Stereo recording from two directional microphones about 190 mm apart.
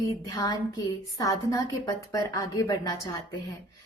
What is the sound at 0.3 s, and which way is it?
A woman's voice, 20° left (ahead or behind).